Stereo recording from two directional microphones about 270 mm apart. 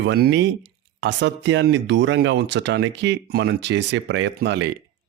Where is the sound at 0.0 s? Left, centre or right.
Right.